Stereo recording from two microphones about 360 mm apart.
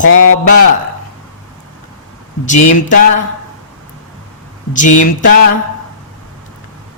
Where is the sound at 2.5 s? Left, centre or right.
Left.